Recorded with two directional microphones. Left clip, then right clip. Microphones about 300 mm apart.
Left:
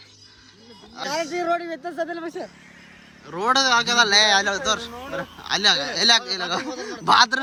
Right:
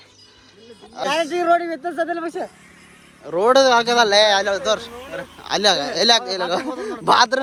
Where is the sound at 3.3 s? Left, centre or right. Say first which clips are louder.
Right 5 dB; centre.